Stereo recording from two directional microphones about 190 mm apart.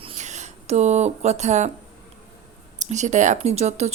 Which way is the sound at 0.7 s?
35° right (ahead or behind).